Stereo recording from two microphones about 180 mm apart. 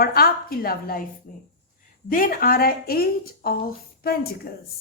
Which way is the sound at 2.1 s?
50° left (ahead or behind).